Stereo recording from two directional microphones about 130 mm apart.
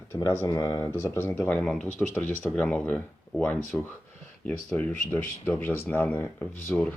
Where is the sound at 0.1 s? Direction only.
25° left (ahead or behind).